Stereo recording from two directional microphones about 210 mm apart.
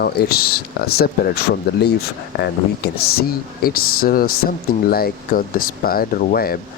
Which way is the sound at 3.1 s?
45° left (ahead or behind).